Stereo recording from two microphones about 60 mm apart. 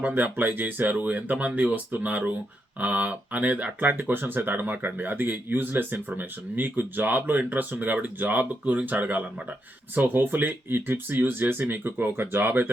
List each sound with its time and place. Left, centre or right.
0.1 s speech: right